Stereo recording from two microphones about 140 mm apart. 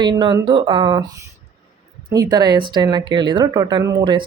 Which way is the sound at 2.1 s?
30° right (ahead or behind).